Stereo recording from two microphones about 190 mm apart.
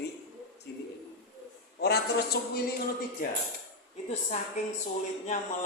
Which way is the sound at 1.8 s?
60° left (ahead or behind).